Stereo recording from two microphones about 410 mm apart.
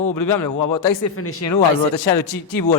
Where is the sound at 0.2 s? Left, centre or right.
Left.